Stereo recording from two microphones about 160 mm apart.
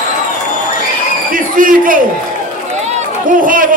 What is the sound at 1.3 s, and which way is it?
A man's voice, 60° right (ahead or behind).